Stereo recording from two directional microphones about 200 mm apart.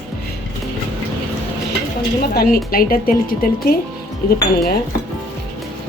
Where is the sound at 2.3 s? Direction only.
50° left (ahead or behind).